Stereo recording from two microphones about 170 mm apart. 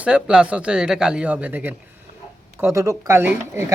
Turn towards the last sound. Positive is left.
turn(degrees=-15)  # may be behind; listen again after turning